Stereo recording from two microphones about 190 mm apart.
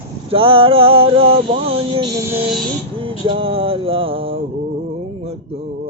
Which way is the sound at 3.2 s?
30° right (ahead or behind).